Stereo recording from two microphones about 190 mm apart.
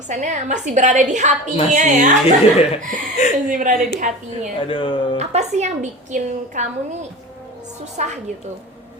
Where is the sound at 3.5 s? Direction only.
45° right (ahead or behind).